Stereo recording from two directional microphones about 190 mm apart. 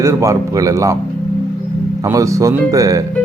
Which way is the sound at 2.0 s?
15° right (ahead or behind).